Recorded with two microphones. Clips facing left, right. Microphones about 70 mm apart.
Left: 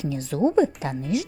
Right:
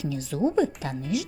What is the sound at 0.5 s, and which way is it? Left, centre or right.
Speech, left.